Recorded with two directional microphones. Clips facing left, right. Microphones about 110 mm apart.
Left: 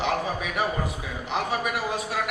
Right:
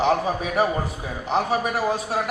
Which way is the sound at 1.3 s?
35° right (ahead or behind).